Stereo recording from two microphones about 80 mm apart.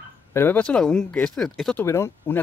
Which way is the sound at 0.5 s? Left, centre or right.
Centre.